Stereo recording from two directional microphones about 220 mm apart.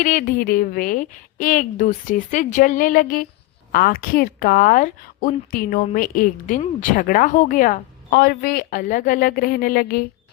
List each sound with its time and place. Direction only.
0.0 s speech: 40° left (ahead or behind)